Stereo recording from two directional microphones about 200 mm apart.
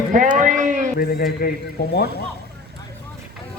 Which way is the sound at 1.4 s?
50° left (ahead or behind).